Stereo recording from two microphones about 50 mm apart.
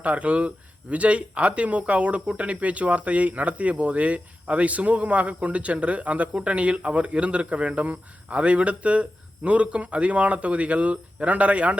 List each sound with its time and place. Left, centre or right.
0.0 s speech: right